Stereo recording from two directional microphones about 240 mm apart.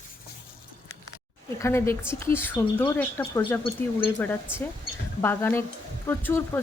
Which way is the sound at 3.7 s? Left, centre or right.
Left.